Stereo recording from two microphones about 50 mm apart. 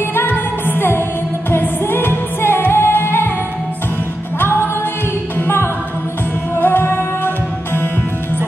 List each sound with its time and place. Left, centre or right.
0.1 s music: left
4.4 s music: left
6.5 s music: left